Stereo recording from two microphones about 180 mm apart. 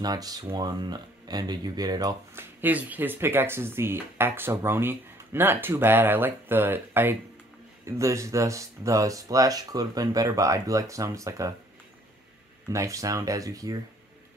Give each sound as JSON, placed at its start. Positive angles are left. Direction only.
{"t": 0.0, "sound": "speech", "side_deg": -20}
{"t": 12.6, "sound": "speech", "side_deg": -15}